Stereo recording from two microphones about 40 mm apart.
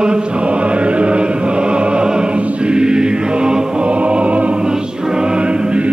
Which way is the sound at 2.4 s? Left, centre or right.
Right.